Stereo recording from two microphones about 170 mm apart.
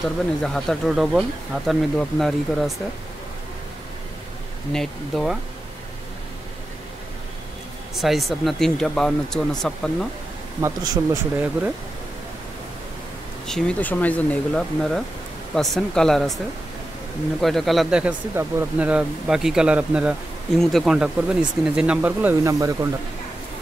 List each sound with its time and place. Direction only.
0.0 s speech: 5° left (ahead or behind)
4.7 s speech: centre (ahead or behind)
7.9 s speech: centre (ahead or behind)
10.6 s speech: 25° right (ahead or behind)
13.5 s speech: 5° left (ahead or behind)
17.4 s speech: centre (ahead or behind)
22.4 s speech: 20° right (ahead or behind)